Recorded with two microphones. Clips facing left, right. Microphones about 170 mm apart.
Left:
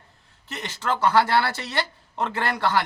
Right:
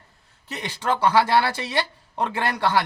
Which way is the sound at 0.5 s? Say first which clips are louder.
Right 2 dB; 15° right (ahead or behind).